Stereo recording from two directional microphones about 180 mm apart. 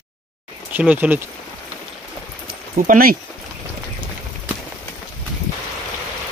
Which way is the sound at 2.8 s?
50° right (ahead or behind).